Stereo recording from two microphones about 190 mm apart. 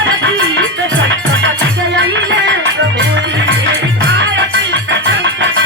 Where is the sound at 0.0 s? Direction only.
75° right (ahead or behind).